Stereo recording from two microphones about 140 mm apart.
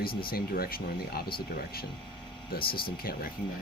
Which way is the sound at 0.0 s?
90° left.